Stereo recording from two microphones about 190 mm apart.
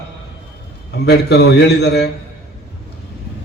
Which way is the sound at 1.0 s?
60° left (ahead or behind).